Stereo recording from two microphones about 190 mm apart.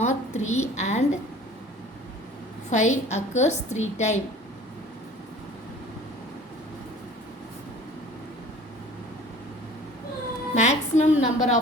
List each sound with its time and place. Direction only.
0.0 s a sound: 40° left (ahead or behind)
0.8 s a woman's voice: 35° left (ahead or behind)
2.6 s a woman's voice: 40° left (ahead or behind)
10.5 s a woman's voice: 35° left (ahead or behind)